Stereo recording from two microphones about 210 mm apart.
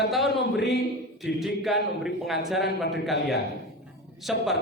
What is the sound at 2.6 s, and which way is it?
Speech, 55° left (ahead or behind).